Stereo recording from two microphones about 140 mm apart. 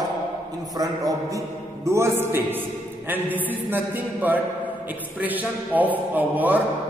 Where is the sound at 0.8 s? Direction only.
25° right (ahead or behind).